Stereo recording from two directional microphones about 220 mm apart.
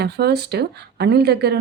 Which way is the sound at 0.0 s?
45° right (ahead or behind).